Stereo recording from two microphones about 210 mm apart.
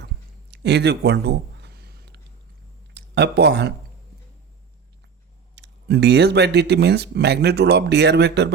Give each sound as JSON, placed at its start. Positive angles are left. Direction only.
{"t": 0.5, "sound": "a sound", "side_deg": -55}
{"t": 2.9, "sound": "speech", "side_deg": -55}
{"t": 5.5, "sound": "speech", "side_deg": -55}